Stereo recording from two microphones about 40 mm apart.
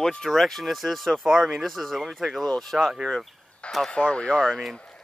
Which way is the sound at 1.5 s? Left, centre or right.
Centre.